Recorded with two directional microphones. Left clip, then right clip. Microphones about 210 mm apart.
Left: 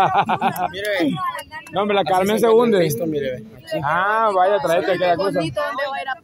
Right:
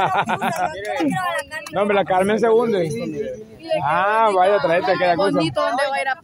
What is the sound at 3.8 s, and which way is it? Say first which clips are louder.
Speech: even; 5° left (ahead or behind).